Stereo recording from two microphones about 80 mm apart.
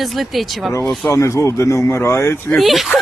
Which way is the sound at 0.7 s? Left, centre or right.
Left.